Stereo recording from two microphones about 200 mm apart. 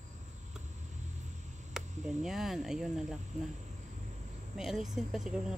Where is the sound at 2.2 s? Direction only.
Centre (ahead or behind).